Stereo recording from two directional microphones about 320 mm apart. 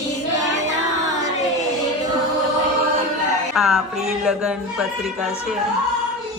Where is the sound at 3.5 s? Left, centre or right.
Centre.